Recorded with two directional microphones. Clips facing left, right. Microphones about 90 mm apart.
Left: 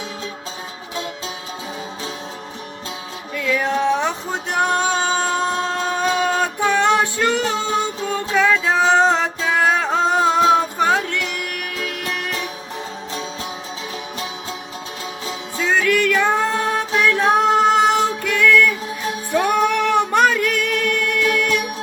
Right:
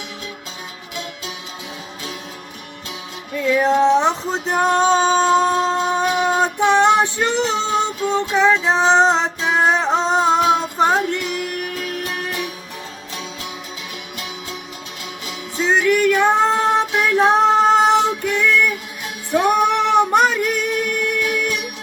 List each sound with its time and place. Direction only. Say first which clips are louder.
3.3 s music: right 4 dB; 30° right (ahead or behind)
15.5 s music: right 2 dB; 20° right (ahead or behind)